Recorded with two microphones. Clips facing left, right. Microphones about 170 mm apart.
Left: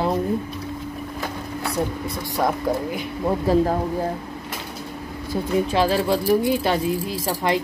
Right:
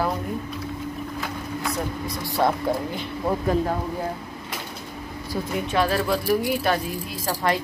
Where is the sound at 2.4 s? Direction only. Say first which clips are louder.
Right 1 dB; 5° left (ahead or behind).